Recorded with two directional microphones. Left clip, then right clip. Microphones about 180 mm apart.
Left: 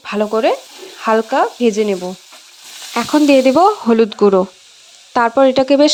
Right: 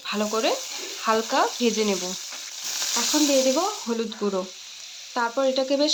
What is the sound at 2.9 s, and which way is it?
Sizzle, 50° left (ahead or behind).